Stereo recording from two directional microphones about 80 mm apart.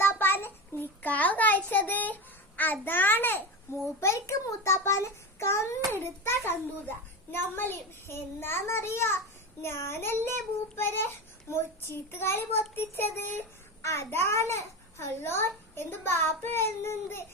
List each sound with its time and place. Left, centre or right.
0.0 s child singing: left
2.8 s a child's voice: left